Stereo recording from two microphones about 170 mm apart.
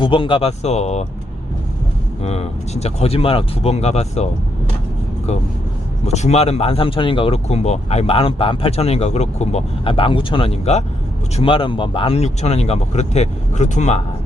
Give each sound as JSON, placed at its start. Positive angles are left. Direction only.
{"t": 0.0, "sound": "speech", "side_deg": 30}
{"t": 2.2, "sound": "speech", "side_deg": 40}
{"t": 5.3, "sound": "speech", "side_deg": 40}